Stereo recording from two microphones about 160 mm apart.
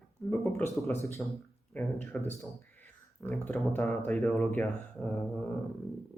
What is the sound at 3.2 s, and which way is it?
Speech, 10° left (ahead or behind).